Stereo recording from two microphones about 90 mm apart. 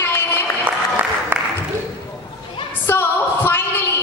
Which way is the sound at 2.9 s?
25° left (ahead or behind).